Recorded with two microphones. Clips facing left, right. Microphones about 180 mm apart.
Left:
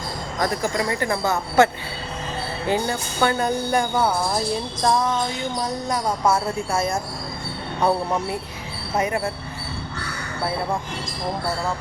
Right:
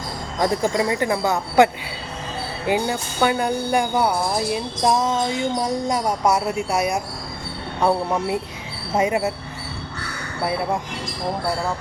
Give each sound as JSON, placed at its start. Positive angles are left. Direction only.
{"t": 0.3, "sound": "speech", "side_deg": -20}
{"t": 9.0, "sound": "speech", "side_deg": -20}